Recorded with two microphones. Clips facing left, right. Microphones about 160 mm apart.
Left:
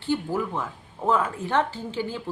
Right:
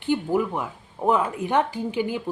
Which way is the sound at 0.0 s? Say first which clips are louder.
Right 3 dB; 15° right (ahead or behind).